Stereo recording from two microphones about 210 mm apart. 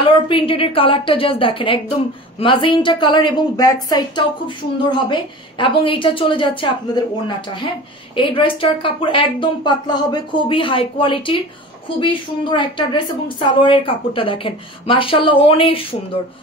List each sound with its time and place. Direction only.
0.3 s a woman's voice: 25° left (ahead or behind)